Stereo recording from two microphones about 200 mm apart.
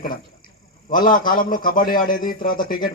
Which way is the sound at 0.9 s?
45° left (ahead or behind).